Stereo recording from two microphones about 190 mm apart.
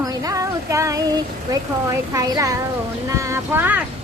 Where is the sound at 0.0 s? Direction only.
20° right (ahead or behind).